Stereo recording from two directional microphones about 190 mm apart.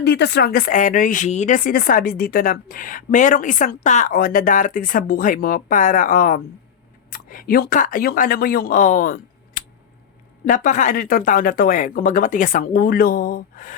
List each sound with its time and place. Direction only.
0.0 s speech: 60° left (ahead or behind)